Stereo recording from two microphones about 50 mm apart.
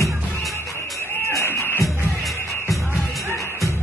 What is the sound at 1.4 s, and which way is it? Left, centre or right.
Music, left.